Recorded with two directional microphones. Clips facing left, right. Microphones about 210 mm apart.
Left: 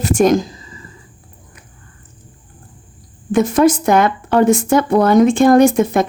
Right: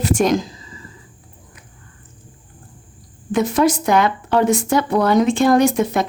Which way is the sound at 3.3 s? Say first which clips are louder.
Left 4 dB; 50° left (ahead or behind).